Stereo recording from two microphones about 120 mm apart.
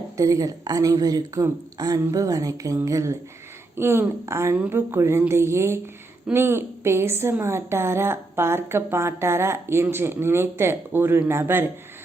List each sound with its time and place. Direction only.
0.2 s a woman's voice: 30° right (ahead or behind)
4.5 s speech: 10° right (ahead or behind)
4.9 s a woman's voice: 20° right (ahead or behind)